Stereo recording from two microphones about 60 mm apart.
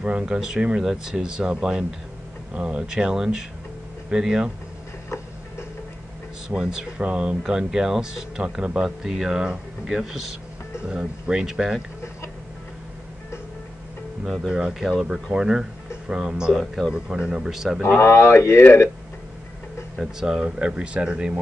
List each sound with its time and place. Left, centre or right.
0.0 s speech: centre
6.5 s speech: centre
14.2 s speech: centre
18.0 s speech: left
20.0 s speech: centre